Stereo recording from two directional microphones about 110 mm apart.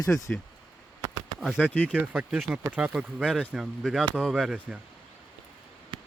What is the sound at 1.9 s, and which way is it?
Speech, 10° right (ahead or behind).